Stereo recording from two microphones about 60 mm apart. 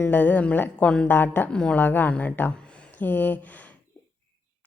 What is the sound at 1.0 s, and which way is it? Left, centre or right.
Speech, left.